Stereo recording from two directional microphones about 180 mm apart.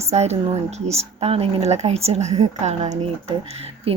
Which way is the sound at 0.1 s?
35° right (ahead or behind).